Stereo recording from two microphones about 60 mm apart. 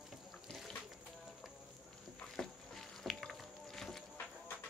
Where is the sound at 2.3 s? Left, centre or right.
Centre.